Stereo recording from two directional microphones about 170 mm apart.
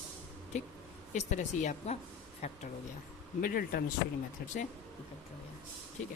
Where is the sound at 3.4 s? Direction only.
60° left (ahead or behind).